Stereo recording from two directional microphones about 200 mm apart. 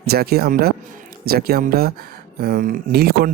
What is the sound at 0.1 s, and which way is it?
Speech, 50° right (ahead or behind).